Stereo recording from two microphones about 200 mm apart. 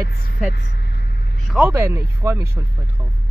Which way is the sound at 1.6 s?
15° right (ahead or behind).